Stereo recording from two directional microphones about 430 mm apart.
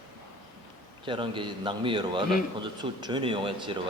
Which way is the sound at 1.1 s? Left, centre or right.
Centre.